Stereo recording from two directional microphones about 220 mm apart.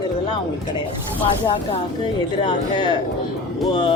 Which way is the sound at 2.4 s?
20° left (ahead or behind).